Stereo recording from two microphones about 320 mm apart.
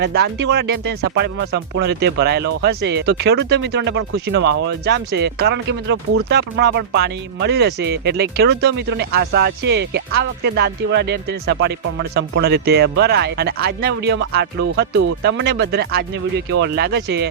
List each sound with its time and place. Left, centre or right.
0.0 s speech: right